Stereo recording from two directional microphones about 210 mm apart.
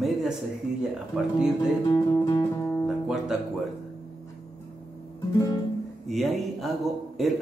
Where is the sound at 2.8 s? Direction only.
Centre (ahead or behind).